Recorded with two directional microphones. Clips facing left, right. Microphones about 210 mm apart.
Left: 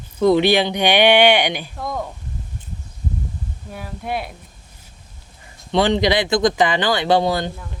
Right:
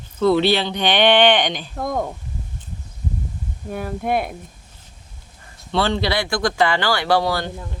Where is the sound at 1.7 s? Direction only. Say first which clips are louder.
Right 3 dB; 50° right (ahead or behind).